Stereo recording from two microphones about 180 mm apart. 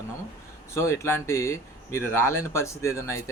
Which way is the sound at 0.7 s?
15° left (ahead or behind).